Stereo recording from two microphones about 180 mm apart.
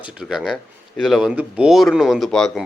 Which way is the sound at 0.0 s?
5° right (ahead or behind).